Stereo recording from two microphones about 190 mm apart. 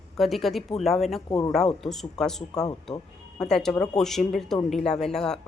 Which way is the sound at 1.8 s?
Centre (ahead or behind).